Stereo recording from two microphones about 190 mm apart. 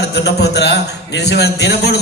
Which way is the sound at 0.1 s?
60° left (ahead or behind).